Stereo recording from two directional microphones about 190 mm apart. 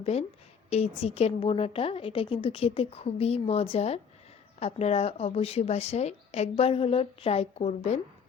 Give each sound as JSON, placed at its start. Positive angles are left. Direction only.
{"t": 0.0, "sound": "a woman's voice", "side_deg": 35}